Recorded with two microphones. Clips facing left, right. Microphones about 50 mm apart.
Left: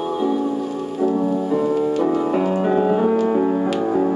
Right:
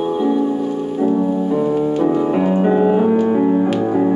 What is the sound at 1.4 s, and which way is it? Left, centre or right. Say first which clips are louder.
Music: right 2 dB; centre.